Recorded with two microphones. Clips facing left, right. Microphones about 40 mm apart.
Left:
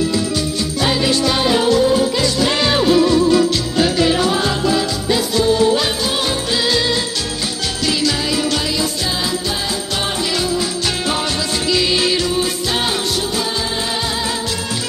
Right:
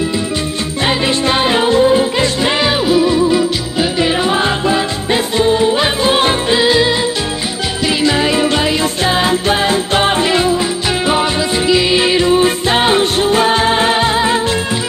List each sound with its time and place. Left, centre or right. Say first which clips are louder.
0.8 s music: right 2 dB; right
2.6 s music: even; centre
4.0 s music: right 2 dB; right
6.6 s music: right 5 dB; right